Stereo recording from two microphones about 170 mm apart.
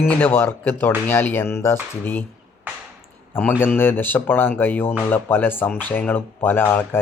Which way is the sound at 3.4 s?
10° left (ahead or behind).